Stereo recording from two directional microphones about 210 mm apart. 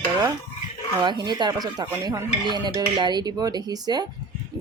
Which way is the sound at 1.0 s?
20° right (ahead or behind).